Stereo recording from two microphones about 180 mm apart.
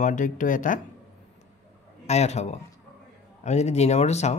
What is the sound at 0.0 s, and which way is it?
Speech, 45° left (ahead or behind).